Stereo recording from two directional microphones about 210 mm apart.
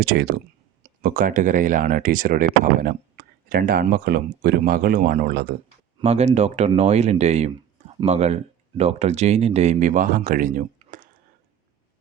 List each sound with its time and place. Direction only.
0.0 s speech: 50° right (ahead or behind)
6.0 s speech: 30° right (ahead or behind)